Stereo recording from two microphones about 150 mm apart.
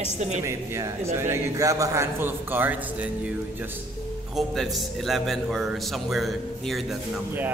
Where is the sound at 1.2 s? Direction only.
20° right (ahead or behind).